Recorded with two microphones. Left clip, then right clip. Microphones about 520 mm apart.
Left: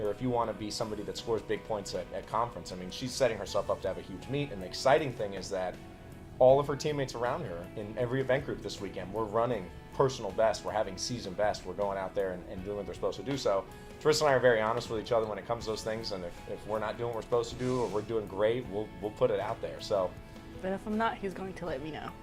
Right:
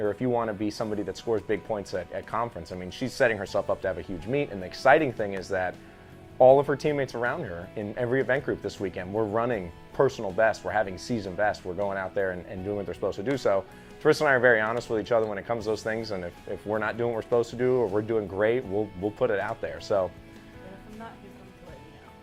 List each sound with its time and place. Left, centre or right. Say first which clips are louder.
0.0 s speech: right 5 dB; right